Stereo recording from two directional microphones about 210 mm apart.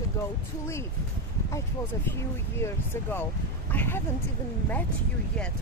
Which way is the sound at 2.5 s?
10° left (ahead or behind).